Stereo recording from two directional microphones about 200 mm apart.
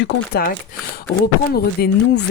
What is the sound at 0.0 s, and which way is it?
Speech, 45° left (ahead or behind).